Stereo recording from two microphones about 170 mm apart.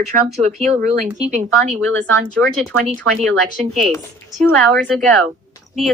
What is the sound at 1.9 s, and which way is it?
Speech, 10° left (ahead or behind).